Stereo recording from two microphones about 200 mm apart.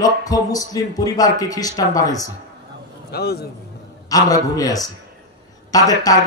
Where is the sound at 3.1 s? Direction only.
55° left (ahead or behind).